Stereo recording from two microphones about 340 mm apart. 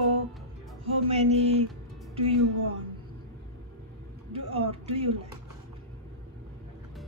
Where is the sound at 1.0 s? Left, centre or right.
Centre.